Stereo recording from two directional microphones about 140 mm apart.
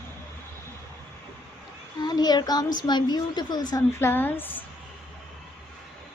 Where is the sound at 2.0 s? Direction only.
30° left (ahead or behind).